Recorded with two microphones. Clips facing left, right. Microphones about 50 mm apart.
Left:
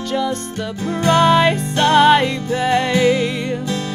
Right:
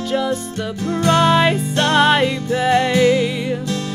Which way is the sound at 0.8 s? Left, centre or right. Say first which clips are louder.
Even; left.